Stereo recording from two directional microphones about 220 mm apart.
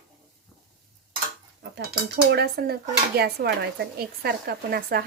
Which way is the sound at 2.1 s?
50° right (ahead or behind).